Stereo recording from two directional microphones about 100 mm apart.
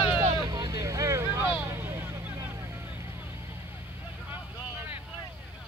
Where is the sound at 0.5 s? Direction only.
40° right (ahead or behind); by 2.5 s 20° right (ahead or behind).